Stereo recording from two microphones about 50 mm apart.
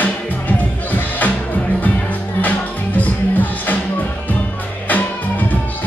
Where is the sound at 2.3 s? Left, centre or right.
Left.